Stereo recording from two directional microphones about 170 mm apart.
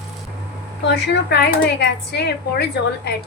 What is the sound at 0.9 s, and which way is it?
Speech, 85° left.